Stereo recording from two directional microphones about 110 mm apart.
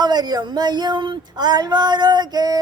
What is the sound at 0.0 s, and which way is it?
Female singing, 40° right (ahead or behind).